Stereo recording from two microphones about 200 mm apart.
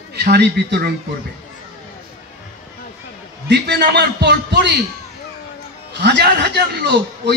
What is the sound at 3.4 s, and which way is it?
A man's voice, 60° right (ahead or behind).